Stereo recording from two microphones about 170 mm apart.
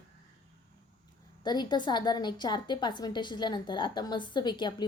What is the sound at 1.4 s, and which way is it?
A woman's voice, 25° left (ahead or behind).